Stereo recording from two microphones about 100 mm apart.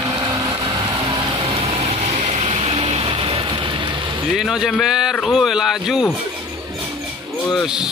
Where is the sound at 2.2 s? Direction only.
90° right; by 3.9 s 60° right (ahead or behind).